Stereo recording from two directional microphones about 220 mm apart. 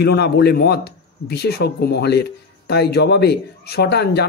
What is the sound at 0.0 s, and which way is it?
A man's voice, 50° left (ahead or behind).